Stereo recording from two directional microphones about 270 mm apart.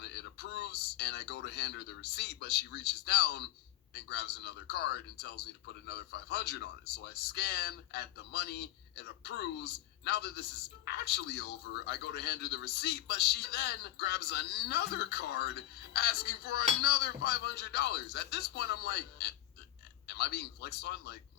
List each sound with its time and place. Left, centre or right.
0.1 s a man's voice: left